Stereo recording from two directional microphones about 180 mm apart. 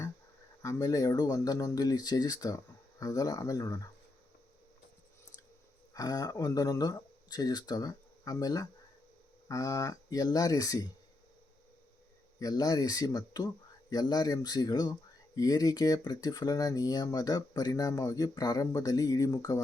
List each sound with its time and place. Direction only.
0.6 s speech: 20° left (ahead or behind)
5.9 s speech: 20° left (ahead or behind)
12.4 s speech: 20° left (ahead or behind)